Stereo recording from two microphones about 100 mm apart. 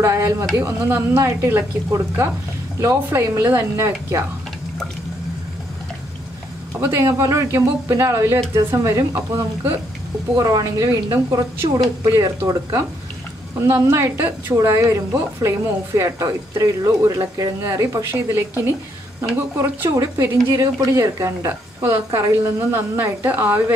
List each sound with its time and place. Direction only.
0.0 s speech: 30° right (ahead or behind)
6.8 s speech: 25° right (ahead or behind)
13.6 s speech: 25° right (ahead or behind)
19.9 s speech: 25° right (ahead or behind)